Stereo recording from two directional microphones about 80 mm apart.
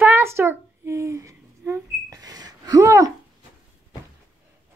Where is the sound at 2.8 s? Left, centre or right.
Right.